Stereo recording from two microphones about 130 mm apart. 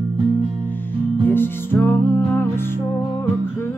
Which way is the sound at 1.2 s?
15° left (ahead or behind).